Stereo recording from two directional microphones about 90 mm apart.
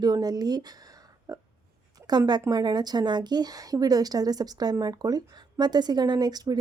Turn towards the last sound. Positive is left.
turn(degrees=-45)  # may be behind; listen again after turning